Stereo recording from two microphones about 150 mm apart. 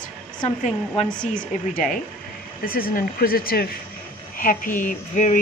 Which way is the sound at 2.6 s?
75° left (ahead or behind).